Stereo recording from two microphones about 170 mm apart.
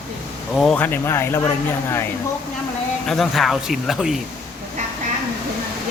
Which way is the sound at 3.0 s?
Centre (ahead or behind).